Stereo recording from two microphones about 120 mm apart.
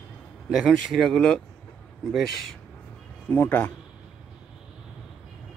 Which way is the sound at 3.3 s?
15° left (ahead or behind).